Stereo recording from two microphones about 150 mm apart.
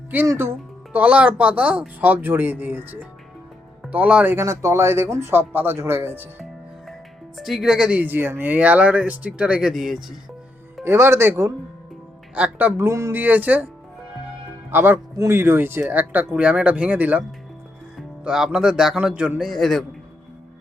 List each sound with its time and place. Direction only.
0.1 s speech: 15° right (ahead or behind)
7.3 s speech: centre (ahead or behind)
10.8 s speech: 15° right (ahead or behind)
14.7 s speech: 15° right (ahead or behind); by 19.8 s centre (ahead or behind)